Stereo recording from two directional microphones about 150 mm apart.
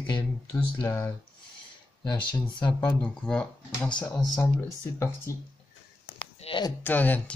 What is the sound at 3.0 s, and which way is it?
Speech, 5° left (ahead or behind).